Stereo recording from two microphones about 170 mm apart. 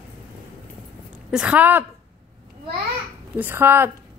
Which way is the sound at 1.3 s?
5° right (ahead or behind).